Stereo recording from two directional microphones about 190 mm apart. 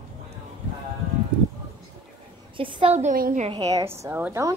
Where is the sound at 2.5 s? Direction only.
30° right (ahead or behind); by 3.4 s 45° right (ahead or behind).